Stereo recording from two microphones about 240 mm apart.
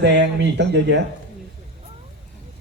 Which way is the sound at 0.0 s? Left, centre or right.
Right.